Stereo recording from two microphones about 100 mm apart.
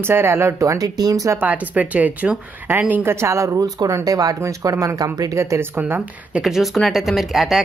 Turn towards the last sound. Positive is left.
turn(degrees=-5)  # may be behind; listen again after turning